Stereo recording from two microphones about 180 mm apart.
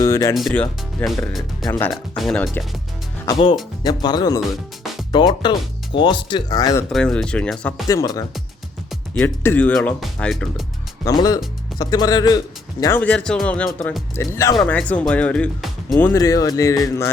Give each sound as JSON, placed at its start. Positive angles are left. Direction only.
{"t": 0.0, "sound": "music", "side_deg": 15}
{"t": 0.3, "sound": "speech", "side_deg": 5}
{"t": 3.8, "sound": "speech", "side_deg": 20}
{"t": 4.4, "sound": "music", "side_deg": 0}
{"t": 5.1, "sound": "speech", "side_deg": 25}
{"t": 6.9, "sound": "speech", "side_deg": 5}
{"t": 7.9, "sound": "speech", "side_deg": 20}
{"t": 8.9, "sound": "speech", "side_deg": 5}
{"t": 11.0, "sound": "speech", "side_deg": 20}
{"t": 14.5, "sound": "speech", "side_deg": 5}
{"t": 16.0, "sound": "speech", "side_deg": 15}